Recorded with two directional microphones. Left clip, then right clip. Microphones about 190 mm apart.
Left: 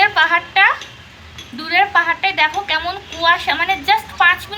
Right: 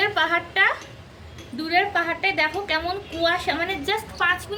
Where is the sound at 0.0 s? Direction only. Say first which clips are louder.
Left 8 dB; 25° left (ahead or behind).